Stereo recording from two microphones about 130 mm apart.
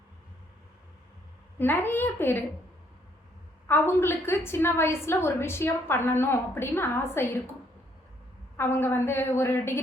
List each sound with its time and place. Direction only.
1.5 s a woman's voice: 15° left (ahead or behind)
3.7 s a woman's voice: 15° left (ahead or behind)
8.5 s a woman's voice: 15° left (ahead or behind)